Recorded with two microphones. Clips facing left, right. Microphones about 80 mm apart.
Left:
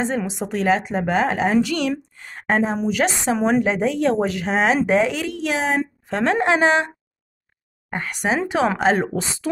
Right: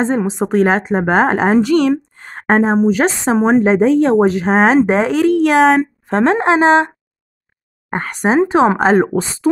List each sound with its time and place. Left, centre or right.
0.0 s speech: right
5.8 s speech: right
7.9 s speech: right